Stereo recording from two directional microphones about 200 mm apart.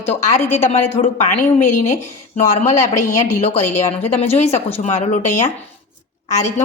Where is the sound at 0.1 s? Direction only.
35° left (ahead or behind).